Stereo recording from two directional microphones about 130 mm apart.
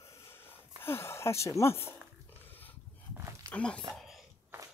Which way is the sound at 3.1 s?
20° right (ahead or behind).